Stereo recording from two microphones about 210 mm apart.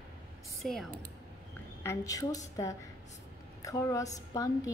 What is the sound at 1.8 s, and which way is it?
Speech, 15° left (ahead or behind).